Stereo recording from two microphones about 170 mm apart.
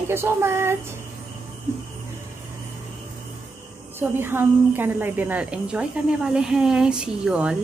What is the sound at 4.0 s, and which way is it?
A woman's voice, 15° right (ahead or behind).